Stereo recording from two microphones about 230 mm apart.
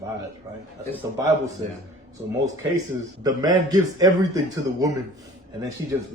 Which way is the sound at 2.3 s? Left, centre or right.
Centre.